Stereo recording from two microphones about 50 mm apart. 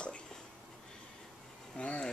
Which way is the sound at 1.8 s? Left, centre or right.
Left.